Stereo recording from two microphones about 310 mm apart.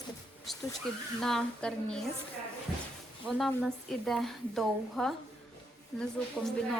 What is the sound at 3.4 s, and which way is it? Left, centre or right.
Speech, centre.